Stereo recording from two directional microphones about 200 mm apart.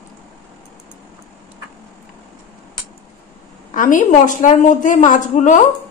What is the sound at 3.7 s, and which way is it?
A woman's voice, 40° left (ahead or behind).